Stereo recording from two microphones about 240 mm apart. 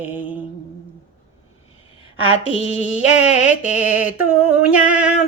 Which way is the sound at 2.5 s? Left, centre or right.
Left.